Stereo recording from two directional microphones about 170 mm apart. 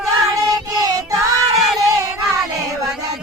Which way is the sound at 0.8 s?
20° right (ahead or behind).